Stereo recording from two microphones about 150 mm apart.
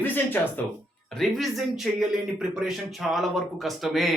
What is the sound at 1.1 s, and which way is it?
Speech, centre (ahead or behind).